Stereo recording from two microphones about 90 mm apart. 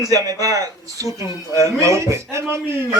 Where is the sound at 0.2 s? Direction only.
40° right (ahead or behind).